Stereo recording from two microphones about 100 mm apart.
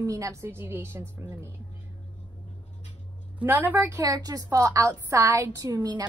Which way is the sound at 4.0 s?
40° right (ahead or behind).